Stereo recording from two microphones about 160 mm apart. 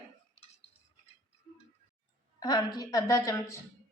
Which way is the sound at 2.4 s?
25° left (ahead or behind).